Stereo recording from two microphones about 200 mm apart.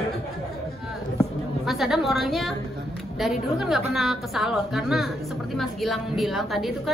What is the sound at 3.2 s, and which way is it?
A woman's voice, centre (ahead or behind).